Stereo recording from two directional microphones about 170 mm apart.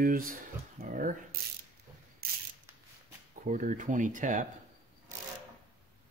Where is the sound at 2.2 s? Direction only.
65° right (ahead or behind).